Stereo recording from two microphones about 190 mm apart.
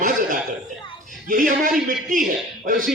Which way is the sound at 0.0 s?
45° right (ahead or behind).